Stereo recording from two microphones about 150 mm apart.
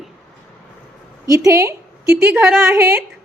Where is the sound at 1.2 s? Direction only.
20° right (ahead or behind).